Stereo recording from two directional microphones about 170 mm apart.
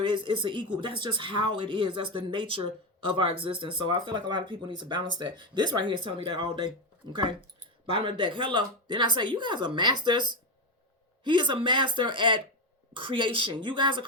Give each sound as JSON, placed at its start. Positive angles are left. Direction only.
{"t": 0.0, "sound": "speech", "side_deg": -30}